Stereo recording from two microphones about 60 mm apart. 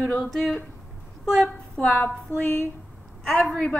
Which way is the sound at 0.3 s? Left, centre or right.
Centre.